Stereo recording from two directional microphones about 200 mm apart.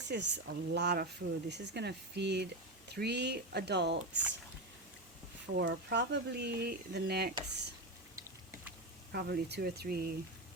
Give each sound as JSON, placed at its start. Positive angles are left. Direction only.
{"t": 0.1, "sound": "speech", "side_deg": -60}
{"t": 5.5, "sound": "speech", "side_deg": -60}
{"t": 9.1, "sound": "speech", "side_deg": -55}